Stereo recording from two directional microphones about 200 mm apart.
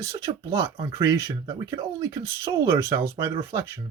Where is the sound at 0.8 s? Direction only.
15° right (ahead or behind).